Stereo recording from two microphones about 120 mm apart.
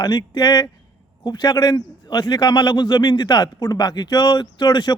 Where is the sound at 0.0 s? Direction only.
35° left (ahead or behind).